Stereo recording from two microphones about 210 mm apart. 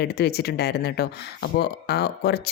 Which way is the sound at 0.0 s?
50° left (ahead or behind).